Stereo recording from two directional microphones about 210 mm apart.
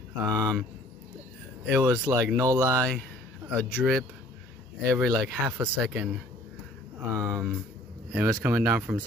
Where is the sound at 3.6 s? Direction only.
5° right (ahead or behind).